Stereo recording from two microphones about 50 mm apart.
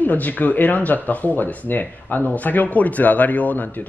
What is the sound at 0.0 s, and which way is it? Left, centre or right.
Speech, left.